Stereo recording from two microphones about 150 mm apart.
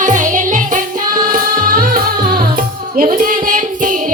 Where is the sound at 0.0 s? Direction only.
55° right (ahead or behind).